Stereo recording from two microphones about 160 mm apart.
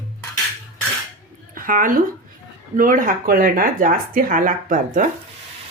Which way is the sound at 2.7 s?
60° right (ahead or behind).